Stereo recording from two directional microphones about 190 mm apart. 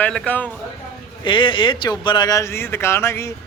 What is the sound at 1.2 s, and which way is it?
A man's voice, 25° left (ahead or behind).